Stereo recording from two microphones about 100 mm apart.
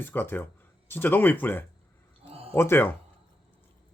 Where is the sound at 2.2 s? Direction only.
80° right.